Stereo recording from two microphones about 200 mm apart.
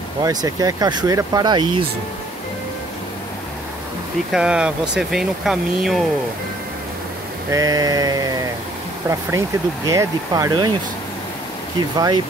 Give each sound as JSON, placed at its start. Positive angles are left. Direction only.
{"t": 0.2, "sound": "speech", "side_deg": -20}
{"t": 4.3, "sound": "speech", "side_deg": -5}
{"t": 7.5, "sound": "speech", "side_deg": -20}
{"t": 9.8, "sound": "speech", "side_deg": -15}